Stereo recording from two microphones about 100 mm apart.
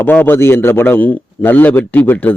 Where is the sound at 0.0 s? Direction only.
20° left (ahead or behind).